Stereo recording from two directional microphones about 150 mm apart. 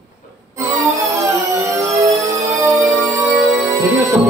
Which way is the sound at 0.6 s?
20° right (ahead or behind).